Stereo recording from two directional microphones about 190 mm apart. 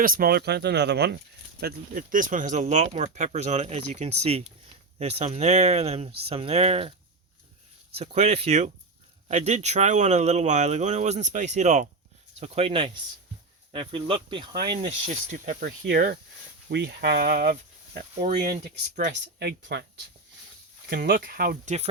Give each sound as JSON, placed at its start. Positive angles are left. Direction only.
{"t": 0.0, "sound": "speech", "side_deg": -50}
{"t": 1.6, "sound": "speech", "side_deg": -45}
{"t": 7.9, "sound": "speech", "side_deg": -35}
{"t": 18.9, "sound": "speech", "side_deg": -50}
{"t": 20.9, "sound": "speech", "side_deg": -60}